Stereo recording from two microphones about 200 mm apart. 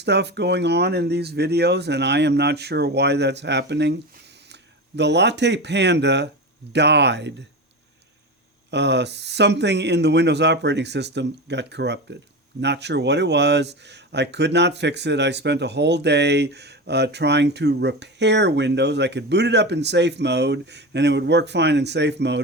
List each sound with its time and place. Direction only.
0.0 s speech: 55° right (ahead or behind)
4.9 s speech: 60° right (ahead or behind)
8.7 s speech: 60° right (ahead or behind)